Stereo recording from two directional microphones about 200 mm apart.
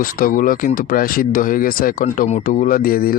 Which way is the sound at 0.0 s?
45° left (ahead or behind).